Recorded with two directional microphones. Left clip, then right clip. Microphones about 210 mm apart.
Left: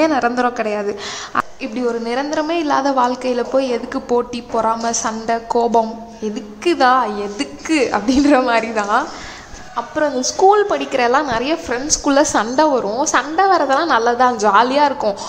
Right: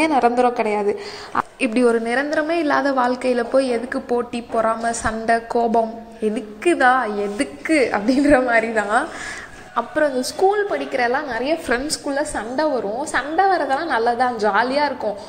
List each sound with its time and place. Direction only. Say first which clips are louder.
0.0 s a woman's voice: left 1 dB; centre (ahead or behind)
1.6 s a woman's voice: right 4 dB; 20° right (ahead or behind)
2.0 s a woman's voice: left 1 dB; 5° right (ahead or behind)
10.5 s a woman's voice: left 6 dB; 10° left (ahead or behind)